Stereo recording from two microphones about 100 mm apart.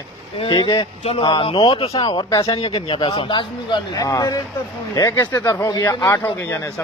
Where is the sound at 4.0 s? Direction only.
35° left (ahead or behind).